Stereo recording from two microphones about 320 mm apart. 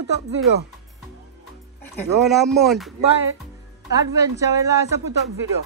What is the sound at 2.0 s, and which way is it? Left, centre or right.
Speech, centre.